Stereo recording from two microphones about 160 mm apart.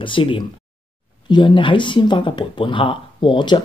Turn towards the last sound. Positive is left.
turn(degrees=30)  # may be behind; listen again after turning